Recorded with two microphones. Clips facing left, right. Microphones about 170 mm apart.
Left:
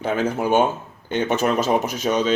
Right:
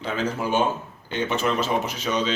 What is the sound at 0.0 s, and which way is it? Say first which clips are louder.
Speech: left 5 dB; 50° left (ahead or behind).